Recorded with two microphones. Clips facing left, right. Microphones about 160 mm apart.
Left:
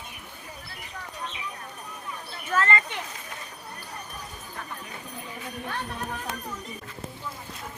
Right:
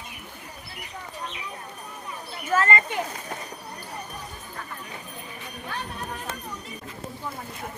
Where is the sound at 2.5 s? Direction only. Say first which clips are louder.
Right 2 dB; 10° right (ahead or behind).